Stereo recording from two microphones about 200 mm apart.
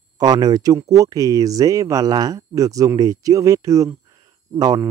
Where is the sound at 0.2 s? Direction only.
20° right (ahead or behind).